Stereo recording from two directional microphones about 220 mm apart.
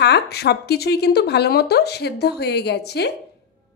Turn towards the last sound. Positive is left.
turn(degrees=50)  # may be behind; listen again after turning